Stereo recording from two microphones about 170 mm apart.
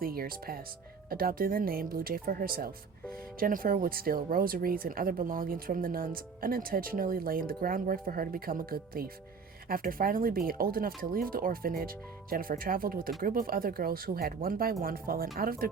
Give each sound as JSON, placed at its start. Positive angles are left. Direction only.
{"t": 0.0, "sound": "speech", "side_deg": -60}